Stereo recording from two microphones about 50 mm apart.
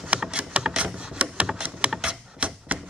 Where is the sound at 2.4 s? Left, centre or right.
Right.